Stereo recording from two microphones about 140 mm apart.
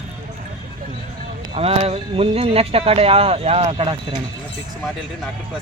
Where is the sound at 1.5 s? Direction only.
45° right (ahead or behind).